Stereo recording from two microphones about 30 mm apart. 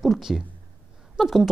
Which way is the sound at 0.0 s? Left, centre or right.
Centre.